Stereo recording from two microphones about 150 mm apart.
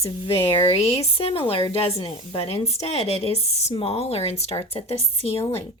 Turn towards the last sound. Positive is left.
turn(degrees=40)  # may be behind; listen again after turning